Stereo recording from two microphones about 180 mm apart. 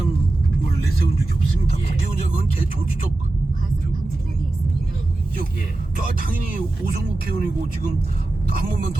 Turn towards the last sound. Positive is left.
turn(degrees=-55)  # may be behind; listen again after turning